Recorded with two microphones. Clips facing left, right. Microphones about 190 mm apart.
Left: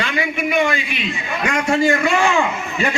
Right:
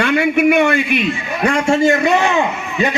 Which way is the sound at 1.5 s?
30° right (ahead or behind).